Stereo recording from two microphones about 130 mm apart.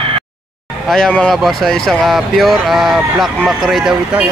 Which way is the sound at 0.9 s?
5° left (ahead or behind).